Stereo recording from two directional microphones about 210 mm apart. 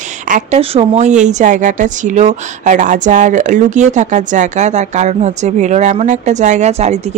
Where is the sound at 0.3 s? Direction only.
30° right (ahead or behind).